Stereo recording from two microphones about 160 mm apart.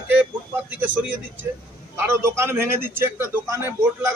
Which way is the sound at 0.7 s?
10° right (ahead or behind).